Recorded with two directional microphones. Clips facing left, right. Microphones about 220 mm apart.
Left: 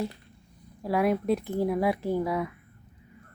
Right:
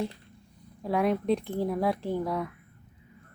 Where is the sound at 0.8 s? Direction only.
5° left (ahead or behind).